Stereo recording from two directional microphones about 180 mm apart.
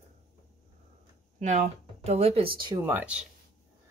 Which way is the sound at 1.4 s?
40° right (ahead or behind).